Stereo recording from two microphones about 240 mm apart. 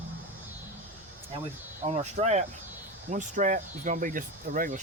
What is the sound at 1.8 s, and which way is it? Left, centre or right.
Speech, right.